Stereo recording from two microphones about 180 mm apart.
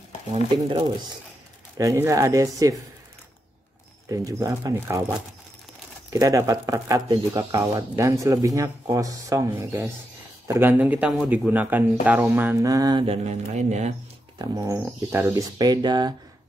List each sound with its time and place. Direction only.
1.8 s speech: 15° right (ahead or behind)
4.1 s speech: 20° right (ahead or behind)
13.0 s speech: 35° right (ahead or behind)
14.4 s speech: 20° right (ahead or behind)